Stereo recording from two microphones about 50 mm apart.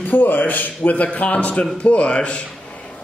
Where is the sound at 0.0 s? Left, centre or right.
Left.